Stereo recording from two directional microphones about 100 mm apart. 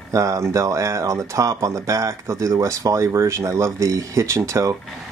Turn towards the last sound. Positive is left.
turn(degrees=-30)  # may be behind; listen again after turning